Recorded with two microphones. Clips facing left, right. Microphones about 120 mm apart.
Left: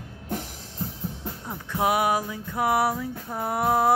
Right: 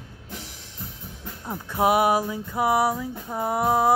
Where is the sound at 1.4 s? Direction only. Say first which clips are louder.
Right 3 dB; 15° right (ahead or behind).